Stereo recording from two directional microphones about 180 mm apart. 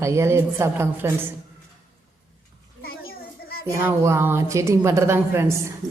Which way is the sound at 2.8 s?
60° left (ahead or behind).